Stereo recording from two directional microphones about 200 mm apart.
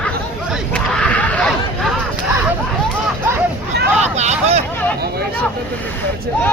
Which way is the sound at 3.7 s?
55° right (ahead or behind).